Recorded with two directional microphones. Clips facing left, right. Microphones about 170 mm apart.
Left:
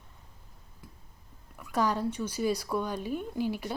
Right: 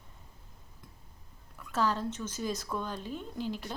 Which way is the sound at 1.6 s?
10° left (ahead or behind).